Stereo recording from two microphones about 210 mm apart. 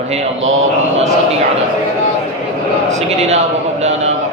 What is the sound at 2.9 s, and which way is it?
A man's voice, 30° right (ahead or behind).